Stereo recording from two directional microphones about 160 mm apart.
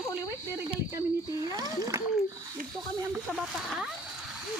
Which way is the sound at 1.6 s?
20° right (ahead or behind).